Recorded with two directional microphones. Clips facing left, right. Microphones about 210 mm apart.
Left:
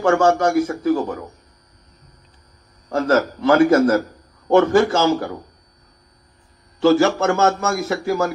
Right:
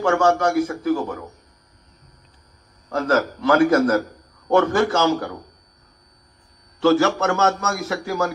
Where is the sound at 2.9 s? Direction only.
30° left (ahead or behind).